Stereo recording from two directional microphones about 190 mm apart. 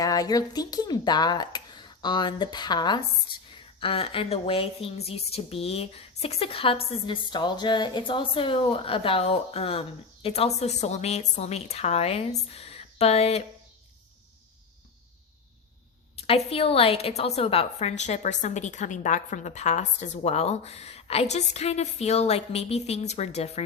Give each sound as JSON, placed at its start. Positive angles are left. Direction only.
{"t": 0.0, "sound": "a woman's voice", "side_deg": 20}
{"t": 16.1, "sound": "a woman's voice", "side_deg": 30}